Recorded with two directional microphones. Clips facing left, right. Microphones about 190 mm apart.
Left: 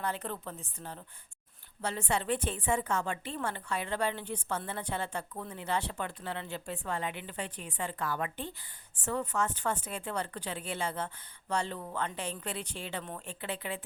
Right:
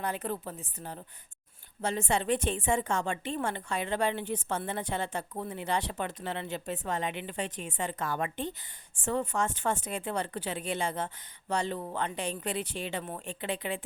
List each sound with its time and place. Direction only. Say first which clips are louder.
0.0 s speech: right 3 dB; 10° right (ahead or behind)
1.8 s a woman's voice: right 3 dB; 25° right (ahead or behind)